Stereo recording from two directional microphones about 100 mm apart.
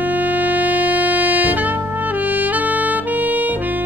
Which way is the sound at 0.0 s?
15° right (ahead or behind).